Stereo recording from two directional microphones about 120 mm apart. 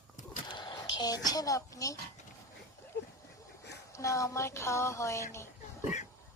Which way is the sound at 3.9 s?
25° left (ahead or behind).